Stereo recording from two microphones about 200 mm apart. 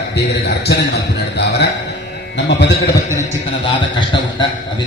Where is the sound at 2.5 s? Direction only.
60° left (ahead or behind).